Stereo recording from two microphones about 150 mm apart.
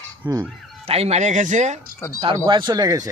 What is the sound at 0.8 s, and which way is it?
Speech, 45° right (ahead or behind).